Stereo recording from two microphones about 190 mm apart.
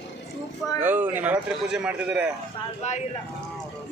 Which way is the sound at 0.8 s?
10° right (ahead or behind).